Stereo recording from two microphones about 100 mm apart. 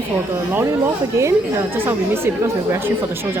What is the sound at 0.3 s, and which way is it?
Speech, 25° right (ahead or behind).